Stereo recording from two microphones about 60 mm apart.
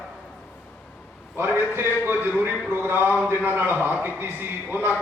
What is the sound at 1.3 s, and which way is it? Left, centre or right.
A man's voice, right.